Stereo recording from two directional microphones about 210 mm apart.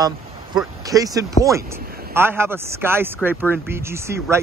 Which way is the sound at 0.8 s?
15° right (ahead or behind).